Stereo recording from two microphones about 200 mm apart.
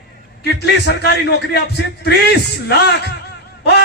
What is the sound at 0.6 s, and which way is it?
A man's voice, 55° left (ahead or behind).